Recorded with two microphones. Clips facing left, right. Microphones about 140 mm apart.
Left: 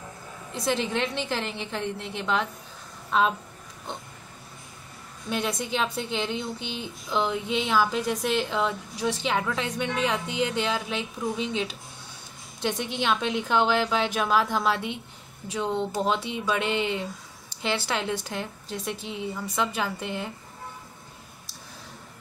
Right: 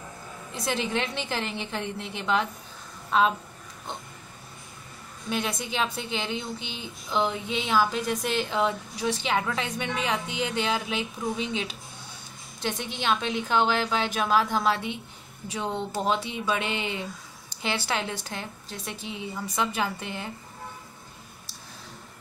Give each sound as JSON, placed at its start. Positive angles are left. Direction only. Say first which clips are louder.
{"t": 0.7, "sound": "speech", "louder": "left 2 dB", "side_deg": 0}
{"t": 5.3, "sound": "speech", "louder": "left 2 dB", "side_deg": 0}